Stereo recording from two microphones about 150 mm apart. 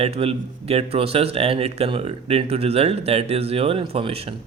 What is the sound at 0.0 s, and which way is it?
A man's voice, 40° right (ahead or behind).